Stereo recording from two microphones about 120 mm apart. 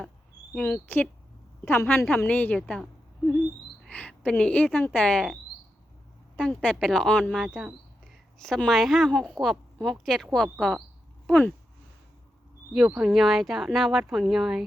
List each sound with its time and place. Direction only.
0.5 s a woman's voice: 10° left (ahead or behind)
3.8 s speech: 10° left (ahead or behind)
7.4 s a woman's voice: 5° right (ahead or behind)
13.0 s a woman's voice: centre (ahead or behind)